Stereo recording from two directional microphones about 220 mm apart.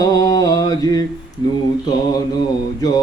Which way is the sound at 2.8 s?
20° left (ahead or behind).